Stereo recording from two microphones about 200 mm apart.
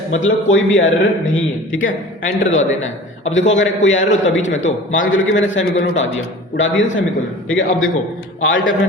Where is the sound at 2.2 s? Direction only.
35° left (ahead or behind).